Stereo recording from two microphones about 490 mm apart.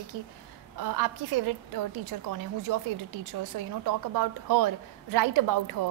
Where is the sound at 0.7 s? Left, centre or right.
Right.